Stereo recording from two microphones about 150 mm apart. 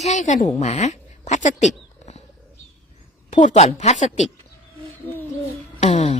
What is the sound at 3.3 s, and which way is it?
A woman's voice, 55° left (ahead or behind).